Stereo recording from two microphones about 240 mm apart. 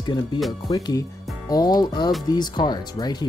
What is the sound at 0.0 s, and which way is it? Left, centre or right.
Speech, centre.